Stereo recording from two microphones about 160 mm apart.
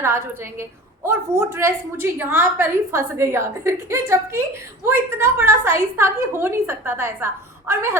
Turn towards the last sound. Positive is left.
turn(degrees=-15)  # may be behind; listen again after turning